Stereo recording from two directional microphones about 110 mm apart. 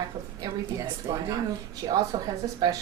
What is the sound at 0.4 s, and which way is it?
A woman's voice, 35° right (ahead or behind).